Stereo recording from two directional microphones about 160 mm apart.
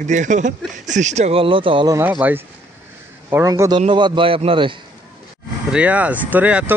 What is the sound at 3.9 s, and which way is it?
Speech, 30° right (ahead or behind).